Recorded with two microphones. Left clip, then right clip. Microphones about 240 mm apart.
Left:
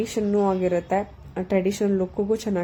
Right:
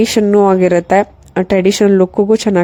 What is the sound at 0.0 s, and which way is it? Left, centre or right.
Speech, right.